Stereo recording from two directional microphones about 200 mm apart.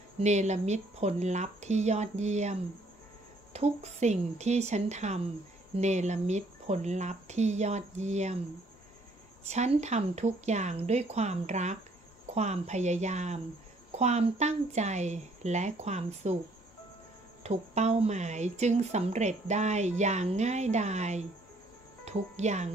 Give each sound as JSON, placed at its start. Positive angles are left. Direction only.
{"t": 0.2, "sound": "speech", "side_deg": -35}
{"t": 9.4, "sound": "speech", "side_deg": -35}
{"t": 17.4, "sound": "speech", "side_deg": -35}